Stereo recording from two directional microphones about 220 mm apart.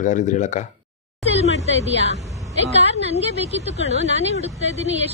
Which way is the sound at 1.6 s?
30° right (ahead or behind).